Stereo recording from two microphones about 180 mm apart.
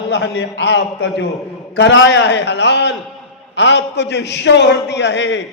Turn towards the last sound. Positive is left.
turn(degrees=80)